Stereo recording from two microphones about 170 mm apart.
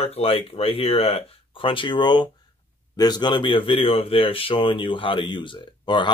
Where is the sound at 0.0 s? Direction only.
35° left (ahead or behind).